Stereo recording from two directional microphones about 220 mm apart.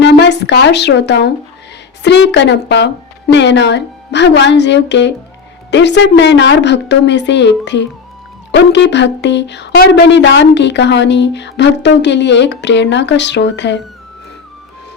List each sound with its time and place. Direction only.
0.0 s a woman's voice: 50° left (ahead or behind)